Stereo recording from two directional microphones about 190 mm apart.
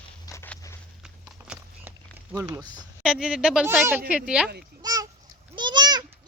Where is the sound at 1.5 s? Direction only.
5° right (ahead or behind).